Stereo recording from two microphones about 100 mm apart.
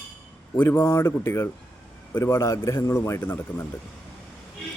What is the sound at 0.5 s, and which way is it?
A man's voice, 25° left (ahead or behind).